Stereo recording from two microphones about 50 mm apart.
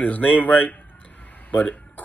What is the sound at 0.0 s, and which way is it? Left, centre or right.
Speech, left.